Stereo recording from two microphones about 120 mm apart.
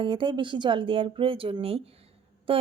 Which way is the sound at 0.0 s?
45° right (ahead or behind).